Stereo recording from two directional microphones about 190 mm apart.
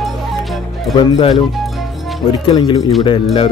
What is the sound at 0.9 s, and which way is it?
Speech, 30° left (ahead or behind).